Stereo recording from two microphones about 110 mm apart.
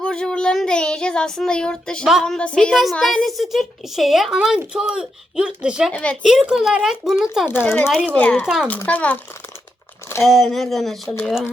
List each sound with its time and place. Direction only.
0.0 s child singing: 5° left (ahead or behind)
2.2 s a woman's voice: 10° left (ahead or behind); by 5.9 s 5° right (ahead or behind)
5.9 s speech: 10° left (ahead or behind)
6.2 s a woman's voice: 5° right (ahead or behind)
7.4 s speech: 20° left (ahead or behind)
10.2 s a woman's voice: centre (ahead or behind)